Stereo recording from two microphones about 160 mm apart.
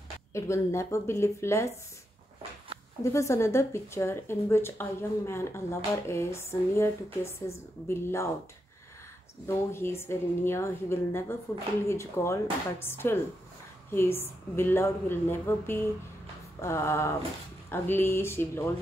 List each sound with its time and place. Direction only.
0.3 s speech: 15° left (ahead or behind)
3.0 s speech: 20° left (ahead or behind)
9.7 s speech: 15° left (ahead or behind)